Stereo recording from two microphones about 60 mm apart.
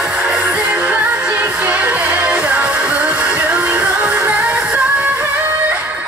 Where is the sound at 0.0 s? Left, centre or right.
Centre.